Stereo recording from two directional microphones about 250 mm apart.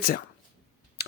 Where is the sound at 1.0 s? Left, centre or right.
Left.